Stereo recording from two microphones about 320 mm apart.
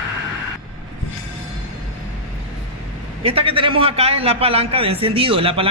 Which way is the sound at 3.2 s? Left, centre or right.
Centre.